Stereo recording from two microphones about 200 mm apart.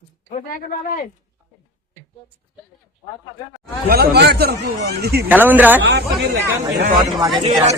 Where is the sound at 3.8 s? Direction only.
50° right (ahead or behind).